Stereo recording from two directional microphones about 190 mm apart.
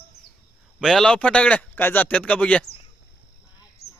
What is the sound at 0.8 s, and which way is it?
Speech, centre (ahead or behind).